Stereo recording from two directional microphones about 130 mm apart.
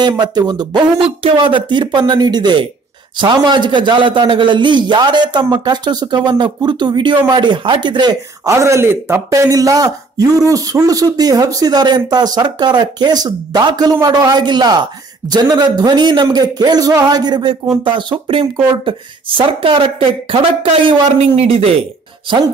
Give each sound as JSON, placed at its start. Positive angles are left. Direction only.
{"t": 0.2, "sound": "a man's voice", "side_deg": -30}
{"t": 1.0, "sound": "a man's voice", "side_deg": -40}